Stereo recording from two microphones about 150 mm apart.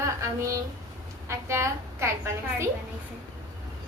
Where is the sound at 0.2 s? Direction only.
20° right (ahead or behind).